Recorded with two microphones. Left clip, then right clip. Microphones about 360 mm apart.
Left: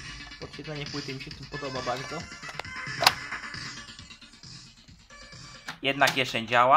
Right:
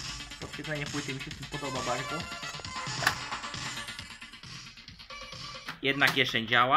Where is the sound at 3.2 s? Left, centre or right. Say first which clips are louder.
Even; centre.